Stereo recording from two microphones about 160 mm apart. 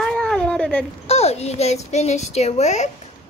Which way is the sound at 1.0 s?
40° left (ahead or behind).